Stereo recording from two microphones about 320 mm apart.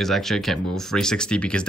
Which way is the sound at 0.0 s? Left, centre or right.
Centre.